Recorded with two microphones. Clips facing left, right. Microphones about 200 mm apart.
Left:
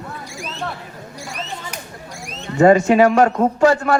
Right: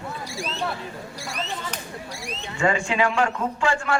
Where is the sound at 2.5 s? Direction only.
40° left (ahead or behind).